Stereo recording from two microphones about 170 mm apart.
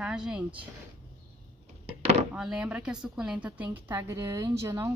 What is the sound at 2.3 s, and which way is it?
A woman's voice, 5° right (ahead or behind).